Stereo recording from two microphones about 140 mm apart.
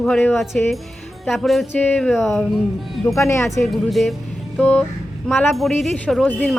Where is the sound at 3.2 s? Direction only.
20° left (ahead or behind).